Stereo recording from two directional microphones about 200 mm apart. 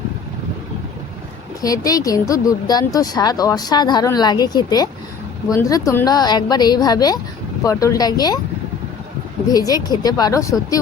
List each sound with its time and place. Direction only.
1.6 s speech: 15° left (ahead or behind)
9.5 s speech: 20° left (ahead or behind)